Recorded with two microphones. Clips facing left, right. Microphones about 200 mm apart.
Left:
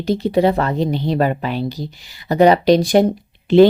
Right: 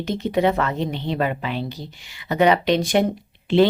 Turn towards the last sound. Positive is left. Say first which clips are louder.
# left 6 dB
turn(degrees=40)  # may be behind; listen again after turning